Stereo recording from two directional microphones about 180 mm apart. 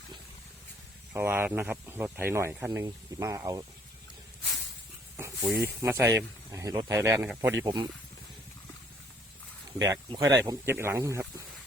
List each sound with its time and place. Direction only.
1.1 s speech: 10° right (ahead or behind)
5.1 s speech: 15° right (ahead or behind)
9.7 s speech: 20° right (ahead or behind)